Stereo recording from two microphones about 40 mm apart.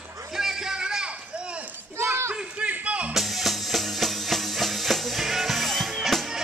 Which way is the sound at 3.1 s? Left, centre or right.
Centre.